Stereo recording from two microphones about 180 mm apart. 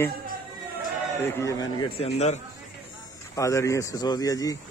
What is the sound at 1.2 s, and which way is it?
A man's voice, 15° left (ahead or behind).